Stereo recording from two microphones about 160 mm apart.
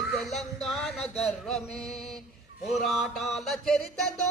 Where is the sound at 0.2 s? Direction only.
Centre (ahead or behind).